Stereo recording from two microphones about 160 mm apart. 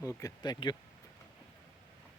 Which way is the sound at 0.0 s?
20° left (ahead or behind).